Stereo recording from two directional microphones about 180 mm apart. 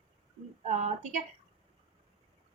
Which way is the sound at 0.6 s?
40° right (ahead or behind).